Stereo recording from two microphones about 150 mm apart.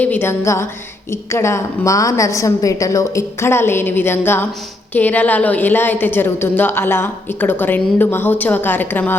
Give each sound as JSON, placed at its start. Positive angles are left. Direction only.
{"t": 0.0, "sound": "a woman's voice", "side_deg": 15}